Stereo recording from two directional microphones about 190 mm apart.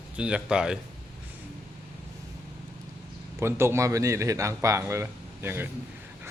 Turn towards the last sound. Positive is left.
turn(degrees=-10)  # may be behind; listen again after turning